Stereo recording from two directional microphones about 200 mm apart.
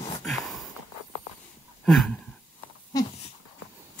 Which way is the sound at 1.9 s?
Centre (ahead or behind).